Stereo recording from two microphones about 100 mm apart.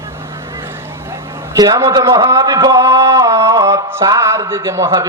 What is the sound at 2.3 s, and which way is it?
Mantra, 30° right (ahead or behind).